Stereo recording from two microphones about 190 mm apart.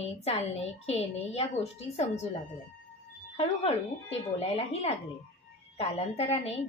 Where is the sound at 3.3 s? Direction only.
35° left (ahead or behind).